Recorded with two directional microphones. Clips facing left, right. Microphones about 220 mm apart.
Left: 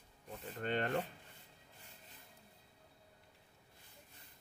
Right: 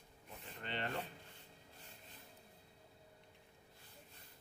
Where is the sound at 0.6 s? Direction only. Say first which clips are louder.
Left 7 dB; 45° left (ahead or behind).